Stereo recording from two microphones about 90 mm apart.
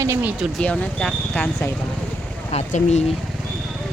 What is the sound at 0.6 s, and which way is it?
Speech, 10° left (ahead or behind).